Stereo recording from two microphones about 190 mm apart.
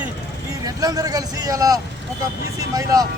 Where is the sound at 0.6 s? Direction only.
20° right (ahead or behind).